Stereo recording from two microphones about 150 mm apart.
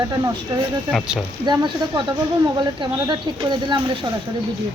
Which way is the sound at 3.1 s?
30° right (ahead or behind).